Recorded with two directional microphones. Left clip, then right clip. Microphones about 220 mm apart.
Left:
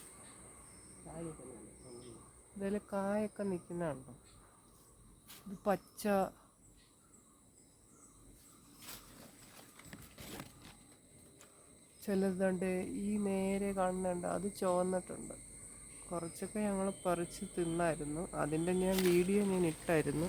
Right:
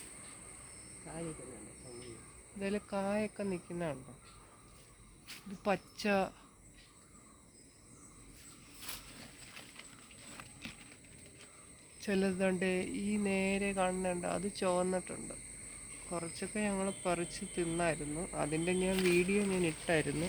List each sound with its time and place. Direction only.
2.6 s cricket: 10° left (ahead or behind)
5.6 s cricket: 10° left (ahead or behind)
12.0 s speech: centre (ahead or behind)
16.0 s cricket: 5° left (ahead or behind)